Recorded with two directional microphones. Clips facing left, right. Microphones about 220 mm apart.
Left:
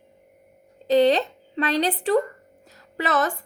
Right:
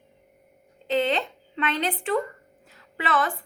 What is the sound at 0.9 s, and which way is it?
A woman's voice, 40° left (ahead or behind).